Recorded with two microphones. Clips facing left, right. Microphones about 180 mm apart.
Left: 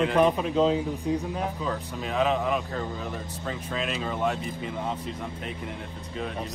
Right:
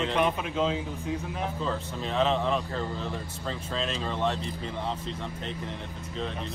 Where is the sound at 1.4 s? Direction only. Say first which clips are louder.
Left 1 dB; 15° left (ahead or behind).